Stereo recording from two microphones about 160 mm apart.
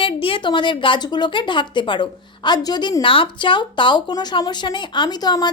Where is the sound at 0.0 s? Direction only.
35° left (ahead or behind).